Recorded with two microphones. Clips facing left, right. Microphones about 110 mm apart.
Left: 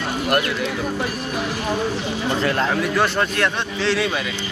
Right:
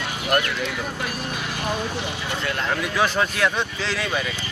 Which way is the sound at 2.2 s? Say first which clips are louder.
Left 9 dB; 40° left (ahead or behind).